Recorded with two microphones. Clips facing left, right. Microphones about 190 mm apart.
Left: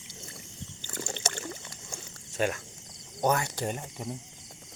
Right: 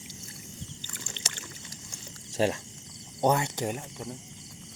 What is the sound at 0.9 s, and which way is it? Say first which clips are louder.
Boat: left 8 dB; 45° left (ahead or behind).